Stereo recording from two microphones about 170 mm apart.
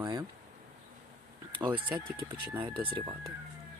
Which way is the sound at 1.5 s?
30° right (ahead or behind).